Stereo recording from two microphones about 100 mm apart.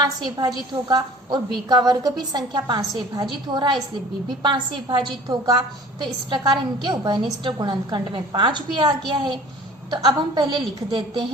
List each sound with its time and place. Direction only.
0.0 s a woman's voice: 45° right (ahead or behind)